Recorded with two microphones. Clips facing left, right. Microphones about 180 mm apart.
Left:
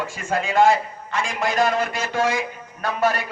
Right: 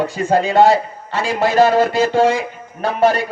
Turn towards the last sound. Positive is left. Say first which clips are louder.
# right 7 dB
turn(degrees=-30)  # may be behind; listen again after turning